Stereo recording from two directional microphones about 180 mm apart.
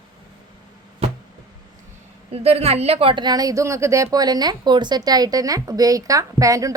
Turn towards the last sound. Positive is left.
turn(degrees=-20)  # may be behind; listen again after turning